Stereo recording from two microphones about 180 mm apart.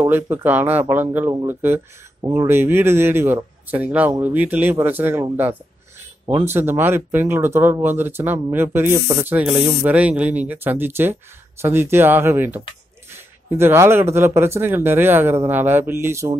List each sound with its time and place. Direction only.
0.0 s speech: 10° right (ahead or behind)
6.2 s speech: 30° right (ahead or behind)
6.5 s speech: 10° right (ahead or behind)